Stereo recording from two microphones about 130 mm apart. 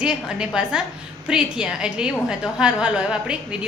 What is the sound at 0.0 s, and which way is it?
A woman's voice, 5° right (ahead or behind).